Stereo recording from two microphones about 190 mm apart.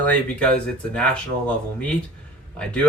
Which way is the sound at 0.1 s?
5° left (ahead or behind).